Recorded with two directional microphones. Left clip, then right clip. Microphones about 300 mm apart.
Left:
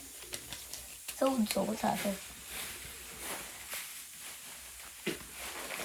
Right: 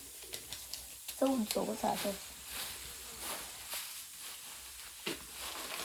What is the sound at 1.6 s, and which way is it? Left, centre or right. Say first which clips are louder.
Speech: left 2 dB; left.